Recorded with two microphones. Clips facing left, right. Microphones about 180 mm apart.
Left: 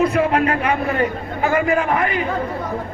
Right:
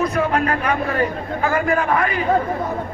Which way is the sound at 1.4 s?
25° left (ahead or behind).